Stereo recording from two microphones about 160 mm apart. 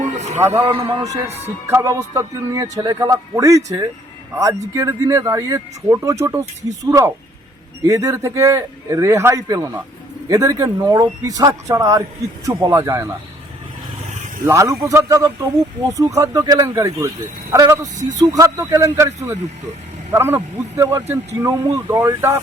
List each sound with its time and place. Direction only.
0.2 s a man's voice: 45° right (ahead or behind); by 13.1 s 20° right (ahead or behind)
14.4 s a man's voice: 20° right (ahead or behind)